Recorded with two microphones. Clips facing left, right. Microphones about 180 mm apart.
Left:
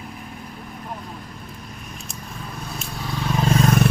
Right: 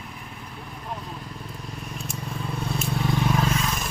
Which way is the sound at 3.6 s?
60° left (ahead or behind).